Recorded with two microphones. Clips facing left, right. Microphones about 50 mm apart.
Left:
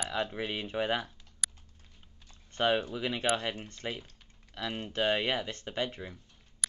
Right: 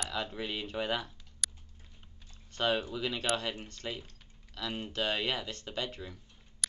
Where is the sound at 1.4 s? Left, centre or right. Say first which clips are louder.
Left 1 dB; centre.